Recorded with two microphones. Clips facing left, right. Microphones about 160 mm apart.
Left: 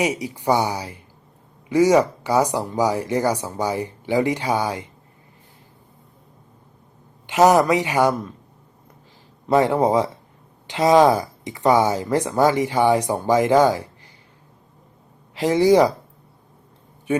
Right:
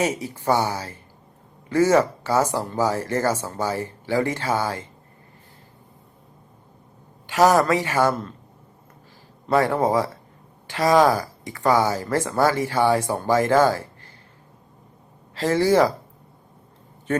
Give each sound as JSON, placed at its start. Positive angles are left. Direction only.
{"t": 0.0, "sound": "speech", "side_deg": 15}
{"t": 7.3, "sound": "speech", "side_deg": 20}
{"t": 9.5, "sound": "speech", "side_deg": 20}
{"t": 15.4, "sound": "speech", "side_deg": 15}